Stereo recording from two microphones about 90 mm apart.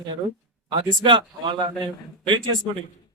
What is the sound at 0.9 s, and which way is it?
A man's voice, 65° right (ahead or behind).